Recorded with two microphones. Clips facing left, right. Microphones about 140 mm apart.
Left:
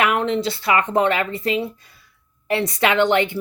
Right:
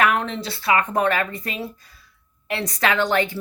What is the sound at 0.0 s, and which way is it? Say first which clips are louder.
Speech: left 2 dB; 25° left (ahead or behind).